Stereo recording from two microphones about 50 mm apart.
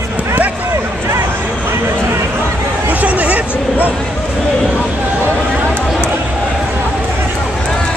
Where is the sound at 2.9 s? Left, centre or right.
Right.